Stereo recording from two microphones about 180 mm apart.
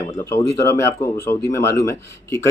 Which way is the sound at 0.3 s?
15° left (ahead or behind).